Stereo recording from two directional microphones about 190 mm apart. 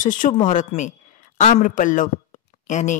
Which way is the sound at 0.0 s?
45° left (ahead or behind).